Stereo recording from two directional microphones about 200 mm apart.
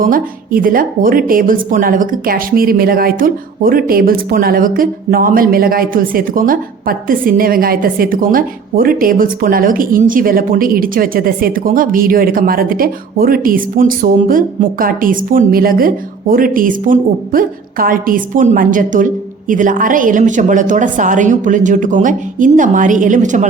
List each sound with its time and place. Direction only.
0.0 s speech: 45° right (ahead or behind)